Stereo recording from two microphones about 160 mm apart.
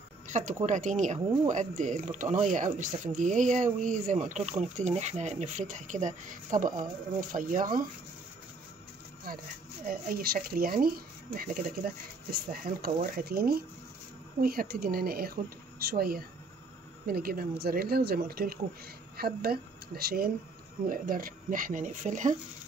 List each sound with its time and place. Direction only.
0.3 s speech: 50° right (ahead or behind)
9.8 s speech: 65° right (ahead or behind); by 22.4 s 50° right (ahead or behind)